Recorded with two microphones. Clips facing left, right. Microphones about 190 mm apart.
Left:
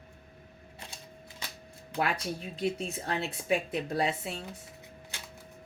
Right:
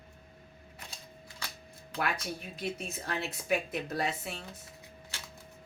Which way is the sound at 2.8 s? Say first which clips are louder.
Left 3 dB; 30° left (ahead or behind).